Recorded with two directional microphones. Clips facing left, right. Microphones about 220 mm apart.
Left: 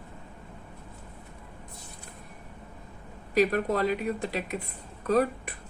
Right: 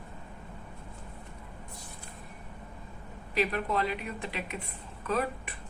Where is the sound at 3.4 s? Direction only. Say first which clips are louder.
Left 5 dB; 45° left (ahead or behind).